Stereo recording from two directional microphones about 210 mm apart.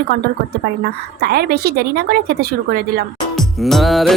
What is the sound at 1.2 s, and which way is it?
Speech, 50° right (ahead or behind).